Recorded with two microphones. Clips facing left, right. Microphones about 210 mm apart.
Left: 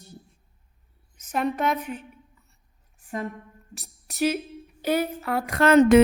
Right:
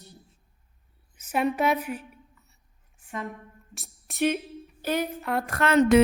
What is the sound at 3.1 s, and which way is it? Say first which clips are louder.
Speech: left 4 dB; 35° left (ahead or behind).